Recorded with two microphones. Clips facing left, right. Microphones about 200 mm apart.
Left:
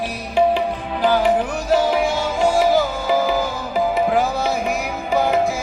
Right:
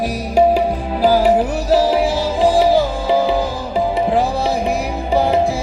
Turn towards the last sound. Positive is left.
turn(degrees=-35)  # may be behind; listen again after turning